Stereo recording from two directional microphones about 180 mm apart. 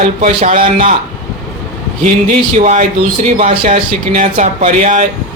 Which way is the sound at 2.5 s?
40° right (ahead or behind).